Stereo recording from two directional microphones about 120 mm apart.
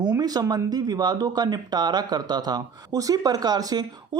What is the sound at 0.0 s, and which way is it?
Speech, 35° right (ahead or behind).